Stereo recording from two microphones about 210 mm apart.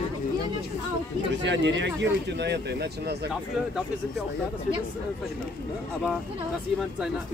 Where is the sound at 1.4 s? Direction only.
60° right (ahead or behind).